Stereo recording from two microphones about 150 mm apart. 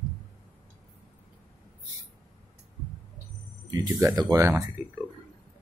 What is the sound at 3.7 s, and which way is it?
Speech, 20° right (ahead or behind).